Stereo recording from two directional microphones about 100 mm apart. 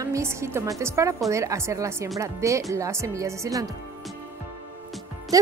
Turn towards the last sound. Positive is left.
turn(degrees=-35)  # may be behind; listen again after turning